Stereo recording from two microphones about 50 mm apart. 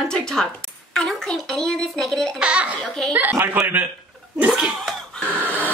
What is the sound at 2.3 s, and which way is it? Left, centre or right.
Speech, right.